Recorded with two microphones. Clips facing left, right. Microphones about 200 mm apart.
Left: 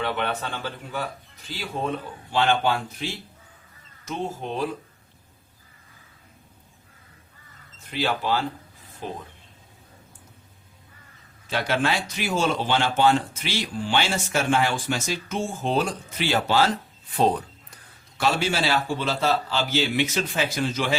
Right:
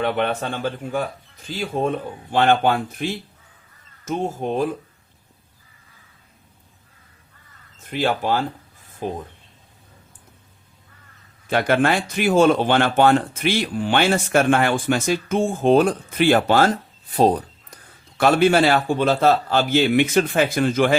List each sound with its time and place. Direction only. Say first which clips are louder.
0.0 s a man's voice: right 5 dB; 50° right (ahead or behind)
7.8 s speech: right 4 dB; 50° right (ahead or behind)
11.4 s speech: right 6 dB; 55° right (ahead or behind); by 17.7 s 35° right (ahead or behind)
18.2 s a man's voice: right 9 dB; 55° right (ahead or behind)